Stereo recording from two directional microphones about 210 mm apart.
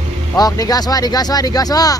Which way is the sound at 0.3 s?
15° left (ahead or behind).